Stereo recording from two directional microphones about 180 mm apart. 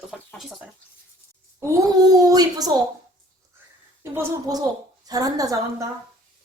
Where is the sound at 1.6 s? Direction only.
15° right (ahead or behind).